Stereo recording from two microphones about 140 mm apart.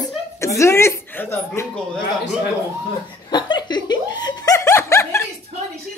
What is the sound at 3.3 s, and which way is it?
Snicker, 30° left (ahead or behind).